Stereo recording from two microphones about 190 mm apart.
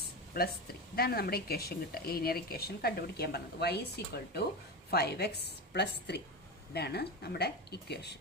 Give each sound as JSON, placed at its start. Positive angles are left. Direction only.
{"t": 0.9, "sound": "speech", "side_deg": 55}